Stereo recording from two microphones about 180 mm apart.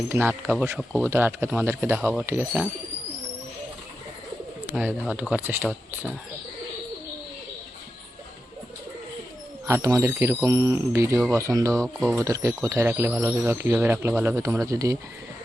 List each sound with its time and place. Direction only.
0.1 s speech: 10° right (ahead or behind)
4.6 s speech: 10° right (ahead or behind)
9.6 s speech: 15° right (ahead or behind)
11.7 s speech: 5° left (ahead or behind)
12.2 s speech: 15° right (ahead or behind)